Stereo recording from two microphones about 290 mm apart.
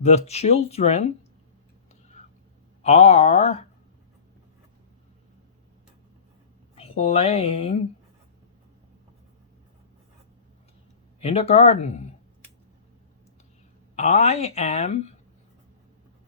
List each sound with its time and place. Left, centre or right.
0.0 s speech: left
2.8 s speech: left
6.7 s speech: left
11.2 s speech: left
13.9 s speech: left